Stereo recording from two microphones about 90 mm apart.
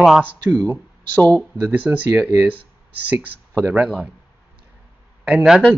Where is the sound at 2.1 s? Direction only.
15° right (ahead or behind).